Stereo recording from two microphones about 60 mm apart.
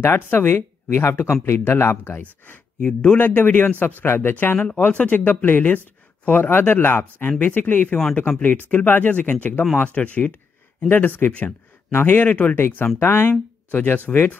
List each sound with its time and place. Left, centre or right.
0.0 s speech: left
2.9 s speech: centre
3.2 s speech: left
4.6 s speech: left
13.7 s speech: left